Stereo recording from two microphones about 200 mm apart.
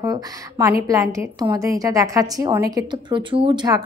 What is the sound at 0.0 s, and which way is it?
A woman's voice, 15° right (ahead or behind).